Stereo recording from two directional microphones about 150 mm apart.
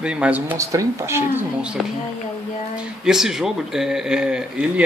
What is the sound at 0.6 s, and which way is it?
Speech, 20° right (ahead or behind).